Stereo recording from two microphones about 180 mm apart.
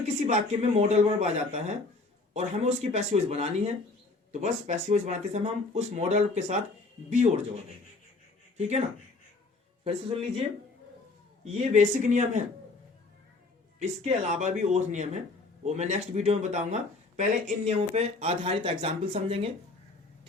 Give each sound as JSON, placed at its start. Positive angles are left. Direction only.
{"t": 0.3, "sound": "speech", "side_deg": -40}
{"t": 9.8, "sound": "speech", "side_deg": -35}
{"t": 11.4, "sound": "speech", "side_deg": -40}
{"t": 13.7, "sound": "speech", "side_deg": -35}